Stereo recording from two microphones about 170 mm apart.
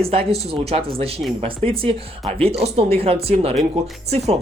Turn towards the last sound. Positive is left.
turn(degrees=-40)  # may be behind; listen again after turning